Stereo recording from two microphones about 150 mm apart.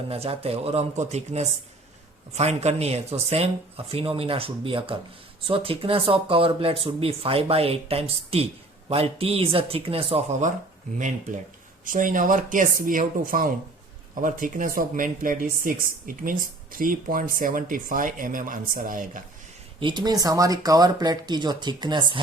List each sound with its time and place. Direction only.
0.1 s speech: 40° right (ahead or behind)
10.9 s speech: 55° right (ahead or behind)
19.8 s speech: 30° right (ahead or behind)